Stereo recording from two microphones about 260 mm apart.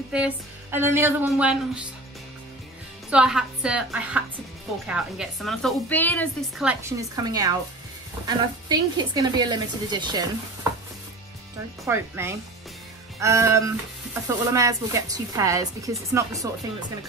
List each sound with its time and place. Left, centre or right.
0.1 s speech: centre
3.1 s a woman's voice: centre
6.7 s speech: centre
11.8 s speech: centre